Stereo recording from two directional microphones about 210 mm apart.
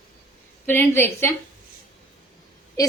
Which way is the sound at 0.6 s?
10° left (ahead or behind).